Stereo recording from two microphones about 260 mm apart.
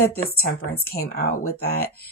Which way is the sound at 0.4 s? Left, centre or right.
Left.